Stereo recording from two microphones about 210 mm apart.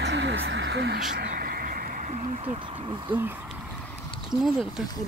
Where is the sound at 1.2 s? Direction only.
45° right (ahead or behind).